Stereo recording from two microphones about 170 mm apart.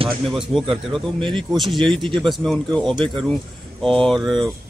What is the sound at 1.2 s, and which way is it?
Speech, 30° right (ahead or behind).